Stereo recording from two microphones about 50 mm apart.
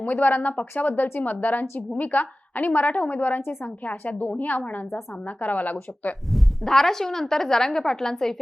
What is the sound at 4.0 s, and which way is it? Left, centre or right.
A woman's voice, left.